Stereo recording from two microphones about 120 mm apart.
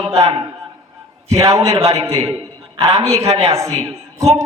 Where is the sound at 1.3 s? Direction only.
30° right (ahead or behind).